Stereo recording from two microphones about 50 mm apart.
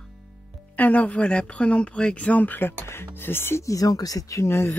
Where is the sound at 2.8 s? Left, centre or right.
Left.